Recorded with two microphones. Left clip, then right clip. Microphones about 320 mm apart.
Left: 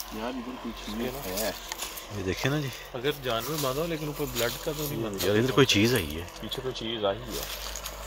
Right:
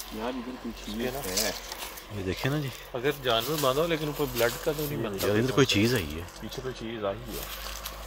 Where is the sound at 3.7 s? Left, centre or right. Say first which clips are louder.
Right 4 dB; right.